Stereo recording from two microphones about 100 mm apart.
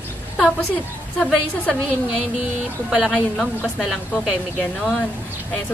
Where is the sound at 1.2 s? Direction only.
10° left (ahead or behind).